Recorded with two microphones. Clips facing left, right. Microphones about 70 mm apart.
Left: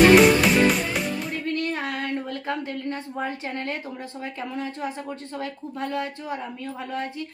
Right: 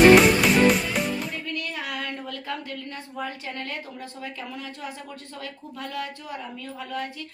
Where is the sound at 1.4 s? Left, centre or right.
Left.